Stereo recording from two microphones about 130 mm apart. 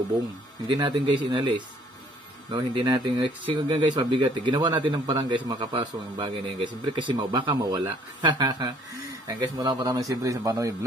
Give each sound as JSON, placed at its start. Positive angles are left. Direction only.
{"t": 0.7, "sound": "a man's voice", "side_deg": -35}